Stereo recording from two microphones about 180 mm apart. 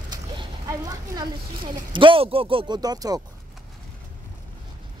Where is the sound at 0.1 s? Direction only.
20° right (ahead or behind).